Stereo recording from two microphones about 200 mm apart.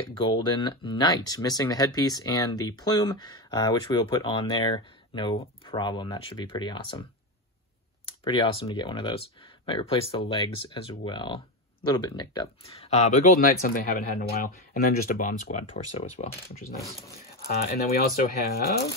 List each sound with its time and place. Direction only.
0.2 s speech: 25° left (ahead or behind)
8.2 s speech: 25° left (ahead or behind); by 15.6 s 40° left (ahead or behind)
15.7 s speech: 30° left (ahead or behind)
18.5 s speech: 50° left (ahead or behind)